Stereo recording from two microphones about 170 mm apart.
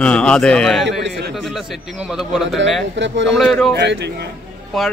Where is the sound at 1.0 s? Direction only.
70° right (ahead or behind).